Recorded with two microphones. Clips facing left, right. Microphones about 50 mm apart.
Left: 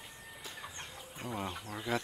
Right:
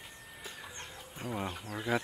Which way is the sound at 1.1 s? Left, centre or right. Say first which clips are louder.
Right 2 dB; centre.